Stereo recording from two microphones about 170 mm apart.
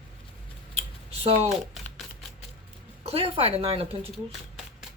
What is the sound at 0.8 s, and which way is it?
Computer keyboard, 35° right (ahead or behind).